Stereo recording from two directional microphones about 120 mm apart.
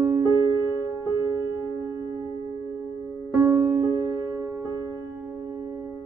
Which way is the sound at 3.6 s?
45° right (ahead or behind).